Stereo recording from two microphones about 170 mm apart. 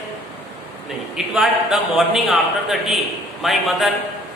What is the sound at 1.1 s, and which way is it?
A man's voice, centre (ahead or behind).